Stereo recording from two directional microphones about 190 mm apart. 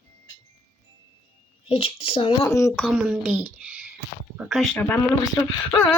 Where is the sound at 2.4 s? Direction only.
15° left (ahead or behind).